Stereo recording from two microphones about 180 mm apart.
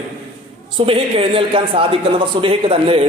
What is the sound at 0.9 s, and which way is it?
A man's voice, 30° right (ahead or behind).